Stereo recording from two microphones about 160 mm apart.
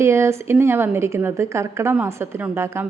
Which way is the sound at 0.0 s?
15° right (ahead or behind).